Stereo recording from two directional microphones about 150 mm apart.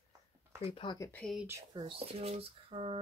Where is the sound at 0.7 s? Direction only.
30° left (ahead or behind).